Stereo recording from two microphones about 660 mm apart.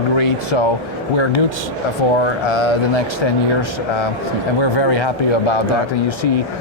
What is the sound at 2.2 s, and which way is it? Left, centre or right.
Speech, left.